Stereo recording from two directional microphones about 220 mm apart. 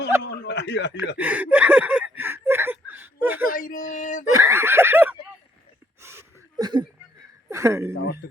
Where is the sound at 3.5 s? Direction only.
35° left (ahead or behind).